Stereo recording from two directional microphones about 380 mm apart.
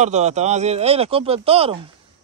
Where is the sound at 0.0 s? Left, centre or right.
Centre.